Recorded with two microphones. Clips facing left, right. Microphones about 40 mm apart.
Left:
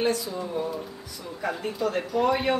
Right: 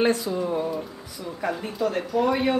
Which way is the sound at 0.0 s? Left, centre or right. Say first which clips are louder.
Right 4 dB; right.